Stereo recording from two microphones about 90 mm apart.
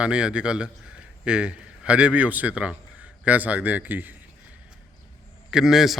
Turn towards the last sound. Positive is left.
turn(degrees=-5)  # may be behind; listen again after turning